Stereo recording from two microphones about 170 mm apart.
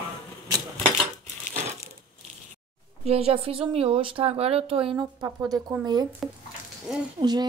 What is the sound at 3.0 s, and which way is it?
Speech, 35° right (ahead or behind).